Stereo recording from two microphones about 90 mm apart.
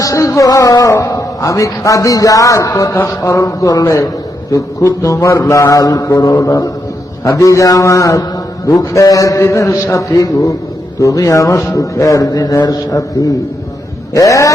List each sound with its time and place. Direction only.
0.0 s music: 35° left (ahead or behind)
1.0 s a man's voice: 40° left (ahead or behind)
2.9 s speech: 25° left (ahead or behind)
3.2 s a man's voice: 40° left (ahead or behind)
14.1 s a man's voice: 40° left (ahead or behind)